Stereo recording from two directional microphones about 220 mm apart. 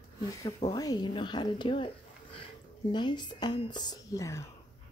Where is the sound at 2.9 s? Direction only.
20° left (ahead or behind).